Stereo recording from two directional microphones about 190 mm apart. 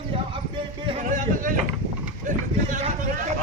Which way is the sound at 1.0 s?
45° right (ahead or behind).